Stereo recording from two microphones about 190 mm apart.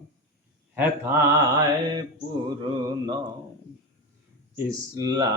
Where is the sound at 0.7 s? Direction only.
10° right (ahead or behind).